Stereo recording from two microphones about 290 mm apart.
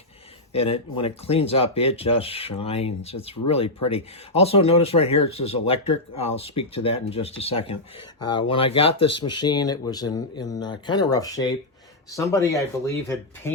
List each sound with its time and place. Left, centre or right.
0.5 s speech: centre